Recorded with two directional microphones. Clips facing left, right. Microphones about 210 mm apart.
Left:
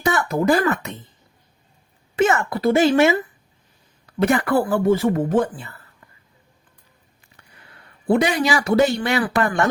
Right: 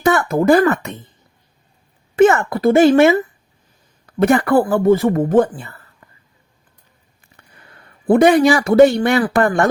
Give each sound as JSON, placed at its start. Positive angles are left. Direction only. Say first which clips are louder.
{"t": 0.0, "sound": "speech", "louder": "right 5 dB", "side_deg": -55}
{"t": 2.1, "sound": "speech", "louder": "right 7 dB", "side_deg": -55}
{"t": 4.2, "sound": "speech", "louder": "right 5 dB", "side_deg": -50}
{"t": 5.3, "sound": "speech", "louder": "right 6 dB", "side_deg": -55}
{"t": 8.0, "sound": "speech", "louder": "right 8 dB", "side_deg": -55}